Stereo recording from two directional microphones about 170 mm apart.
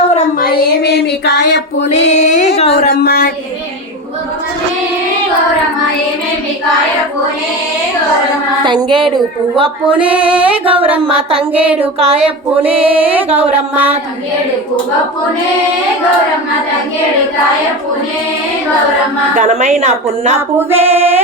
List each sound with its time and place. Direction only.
0.3 s child singing: 60° left (ahead or behind); by 1.6 s 90° left
2.1 s female singing: 45° left (ahead or behind)
2.6 s speech: 35° left (ahead or behind)
2.9 s speech: 65° left (ahead or behind)
8.6 s a sound: 30° right (ahead or behind)
10.1 s music: 10° right (ahead or behind)
11.8 s speech: 35° right (ahead or behind)
12.8 s music: 10° right (ahead or behind)
19.4 s a woman's voice: 45° right (ahead or behind)
20.6 s music: 15° right (ahead or behind)
20.8 s speech: 35° right (ahead or behind)